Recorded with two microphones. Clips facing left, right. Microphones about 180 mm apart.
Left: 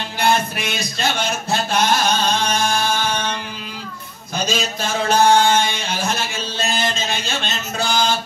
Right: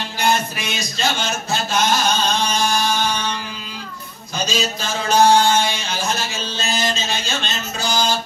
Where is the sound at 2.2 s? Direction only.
55° left (ahead or behind).